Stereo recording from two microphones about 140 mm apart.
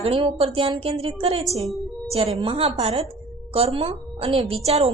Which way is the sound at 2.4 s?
45° right (ahead or behind).